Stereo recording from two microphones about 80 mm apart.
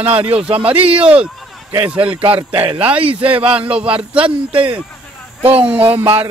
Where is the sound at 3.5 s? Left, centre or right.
Centre.